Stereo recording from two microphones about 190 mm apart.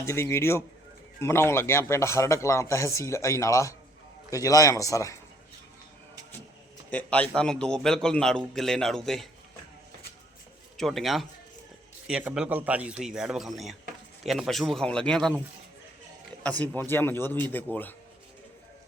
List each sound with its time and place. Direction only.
0.0 s a man's voice: 15° left (ahead or behind)
6.9 s a man's voice: 5° left (ahead or behind)
10.8 s a man's voice: centre (ahead or behind)
16.4 s a man's voice: 5° left (ahead or behind)